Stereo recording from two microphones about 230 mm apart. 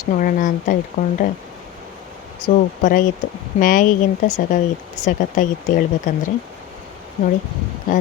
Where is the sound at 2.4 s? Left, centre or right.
Left.